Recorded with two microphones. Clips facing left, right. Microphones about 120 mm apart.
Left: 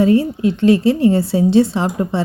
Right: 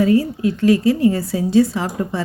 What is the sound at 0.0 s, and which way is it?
A woman's voice, 25° left (ahead or behind).